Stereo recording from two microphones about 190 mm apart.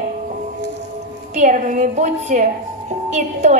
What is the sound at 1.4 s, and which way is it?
A woman's voice, 40° right (ahead or behind).